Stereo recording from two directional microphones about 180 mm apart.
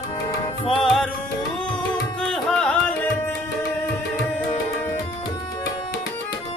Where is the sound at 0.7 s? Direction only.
Centre (ahead or behind).